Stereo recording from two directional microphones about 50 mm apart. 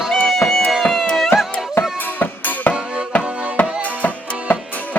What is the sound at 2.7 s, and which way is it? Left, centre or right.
Music, right.